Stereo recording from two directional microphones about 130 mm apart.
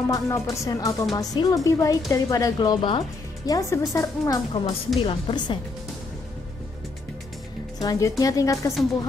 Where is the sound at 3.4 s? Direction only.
25° left (ahead or behind).